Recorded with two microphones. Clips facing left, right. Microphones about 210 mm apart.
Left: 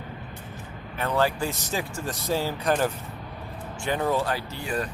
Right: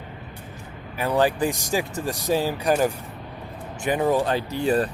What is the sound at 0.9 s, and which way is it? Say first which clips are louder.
Speech: right 4 dB; 15° right (ahead or behind).